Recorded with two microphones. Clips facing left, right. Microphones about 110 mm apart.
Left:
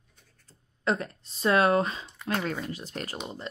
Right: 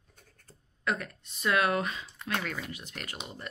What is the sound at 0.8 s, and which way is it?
Speech, 30° left (ahead or behind).